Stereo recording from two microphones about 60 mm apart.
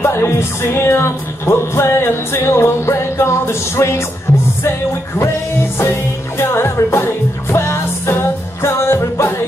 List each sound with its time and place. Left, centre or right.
0.0 s music: left
6.3 s music: left